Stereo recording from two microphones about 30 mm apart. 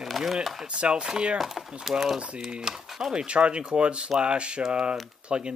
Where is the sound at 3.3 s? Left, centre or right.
Right.